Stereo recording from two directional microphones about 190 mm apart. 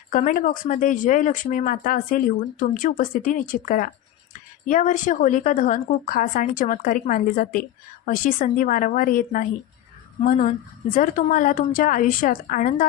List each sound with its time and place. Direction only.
0.1 s a woman's voice: 45° left (ahead or behind)
10.9 s a woman's voice: 45° left (ahead or behind)